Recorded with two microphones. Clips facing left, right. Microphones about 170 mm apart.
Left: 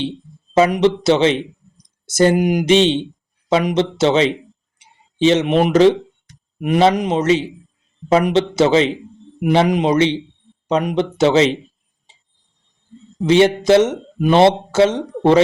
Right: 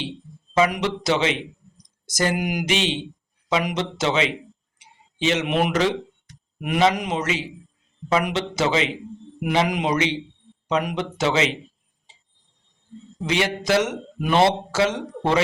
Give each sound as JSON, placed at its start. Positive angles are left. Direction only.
{"t": 0.5, "sound": "speech", "side_deg": 25}
{"t": 13.2, "sound": "speech", "side_deg": 30}